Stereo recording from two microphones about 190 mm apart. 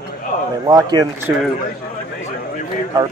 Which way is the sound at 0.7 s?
20° right (ahead or behind).